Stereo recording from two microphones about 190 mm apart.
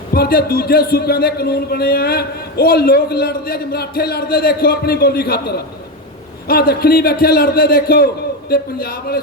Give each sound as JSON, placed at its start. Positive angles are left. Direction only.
{"t": 0.1, "sound": "a man's voice", "side_deg": 50}